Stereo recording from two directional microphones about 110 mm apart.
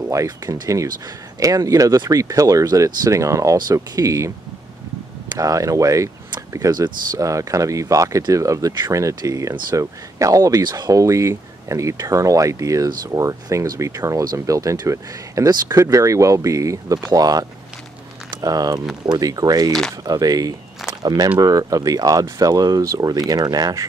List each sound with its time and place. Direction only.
0.1 s speech: 30° right (ahead or behind)
3.5 s speech: 40° right (ahead or behind)
5.3 s speech: 35° right (ahead or behind)